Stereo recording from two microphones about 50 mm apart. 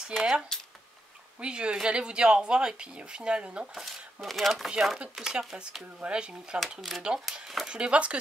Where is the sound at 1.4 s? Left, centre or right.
Centre.